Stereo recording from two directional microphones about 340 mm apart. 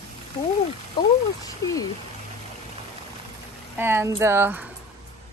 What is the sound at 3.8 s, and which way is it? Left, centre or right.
Speech, centre.